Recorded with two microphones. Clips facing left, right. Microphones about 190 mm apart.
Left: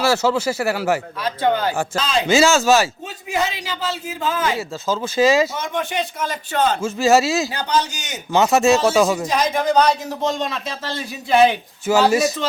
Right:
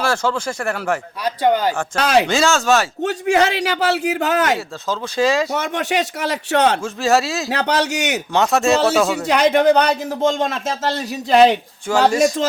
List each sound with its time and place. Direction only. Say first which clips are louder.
0.0 s speech: left 2 dB; 5° left (ahead or behind)
1.2 s speech: right 5 dB; 15° right (ahead or behind)
2.0 s a man's voice: right 8 dB; 70° right (ahead or behind)
2.2 s speech: left 2 dB; 5° left (ahead or behind)
3.0 s a man's voice: right 7 dB; 75° right (ahead or behind)
4.9 s speech: left 2 dB; centre (ahead or behind)
5.5 s a man's voice: right 4 dB; 75° right (ahead or behind)
6.8 s speech: left 2 dB; centre (ahead or behind)
7.5 s a man's voice: right 3 dB; 70° right (ahead or behind)
8.3 s speech: left 2 dB; centre (ahead or behind)
9.2 s speech: right 6 dB; 70° right (ahead or behind); by 11.5 s 40° right (ahead or behind)
11.9 s speech: right 1 dB; 5° left (ahead or behind)